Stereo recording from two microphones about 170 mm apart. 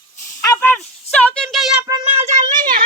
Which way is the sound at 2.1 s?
40° right (ahead or behind).